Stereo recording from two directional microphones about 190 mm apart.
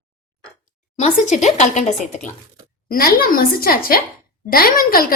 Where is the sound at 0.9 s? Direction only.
40° left (ahead or behind).